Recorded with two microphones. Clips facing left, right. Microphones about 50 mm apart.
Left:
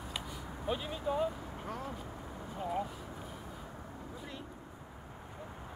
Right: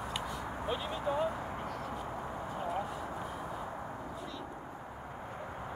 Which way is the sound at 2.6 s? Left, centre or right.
Centre.